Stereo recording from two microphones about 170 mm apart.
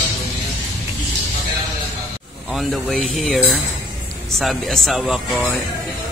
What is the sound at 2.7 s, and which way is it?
A man's voice, centre (ahead or behind).